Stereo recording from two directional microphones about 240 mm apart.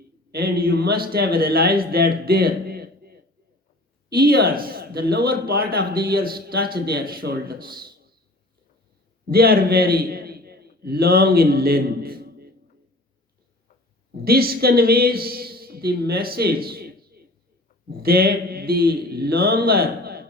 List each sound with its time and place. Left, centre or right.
0.3 s a man's voice: right
9.2 s a man's voice: right
14.1 s a man's voice: right